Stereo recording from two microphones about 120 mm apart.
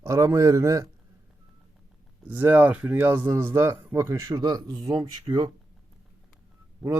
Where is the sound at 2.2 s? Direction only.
15° right (ahead or behind); by 5.5 s 35° right (ahead or behind).